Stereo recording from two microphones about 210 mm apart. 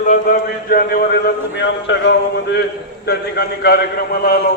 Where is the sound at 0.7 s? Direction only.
45° left (ahead or behind).